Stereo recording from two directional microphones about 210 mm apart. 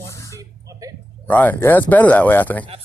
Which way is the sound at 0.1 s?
15° left (ahead or behind).